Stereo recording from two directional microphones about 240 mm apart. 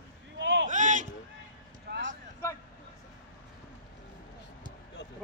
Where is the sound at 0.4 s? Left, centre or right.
Right.